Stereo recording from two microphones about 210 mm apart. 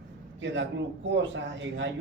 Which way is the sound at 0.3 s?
60° right (ahead or behind).